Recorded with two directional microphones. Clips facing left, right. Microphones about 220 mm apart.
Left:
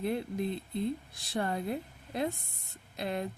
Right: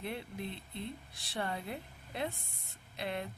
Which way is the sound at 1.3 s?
45° left (ahead or behind).